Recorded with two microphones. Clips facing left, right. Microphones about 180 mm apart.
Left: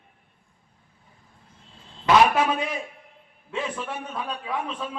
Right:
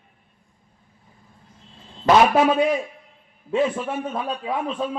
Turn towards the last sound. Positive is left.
turn(degrees=-40)  # may be behind; listen again after turning